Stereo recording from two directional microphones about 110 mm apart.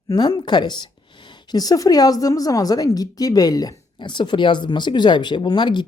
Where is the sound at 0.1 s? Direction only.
40° left (ahead or behind).